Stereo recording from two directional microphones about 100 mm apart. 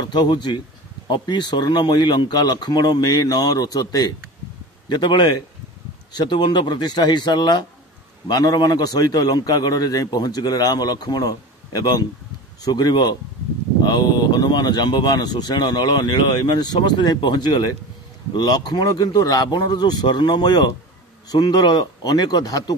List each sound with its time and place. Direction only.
0.0 s speech: 50° left (ahead or behind)